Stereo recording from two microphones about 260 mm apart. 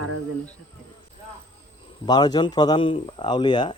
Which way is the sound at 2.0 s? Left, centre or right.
Centre.